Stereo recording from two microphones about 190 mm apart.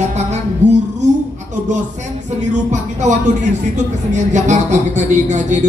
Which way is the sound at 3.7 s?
40° right (ahead or behind).